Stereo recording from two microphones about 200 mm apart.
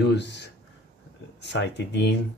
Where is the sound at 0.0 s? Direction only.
60° left (ahead or behind).